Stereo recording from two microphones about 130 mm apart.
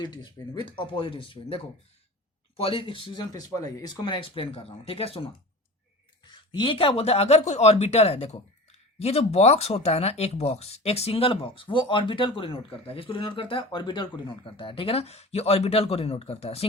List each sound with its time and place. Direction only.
0.0 s speech: 35° left (ahead or behind)
3.3 s speech: 30° left (ahead or behind); by 5.3 s 50° left (ahead or behind)
6.2 s speech: 35° left (ahead or behind)